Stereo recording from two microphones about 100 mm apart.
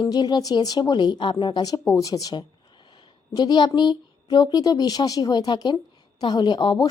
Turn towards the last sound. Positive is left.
turn(degrees=45)  # may be behind; listen again after turning